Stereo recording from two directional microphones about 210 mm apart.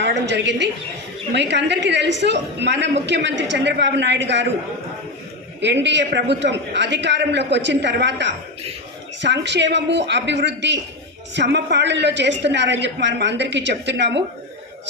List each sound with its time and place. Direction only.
0.0 s a man's voice: 55° right (ahead or behind)
5.5 s a man's voice: 55° right (ahead or behind)